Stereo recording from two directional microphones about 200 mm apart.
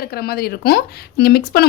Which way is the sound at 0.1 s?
50° left (ahead or behind).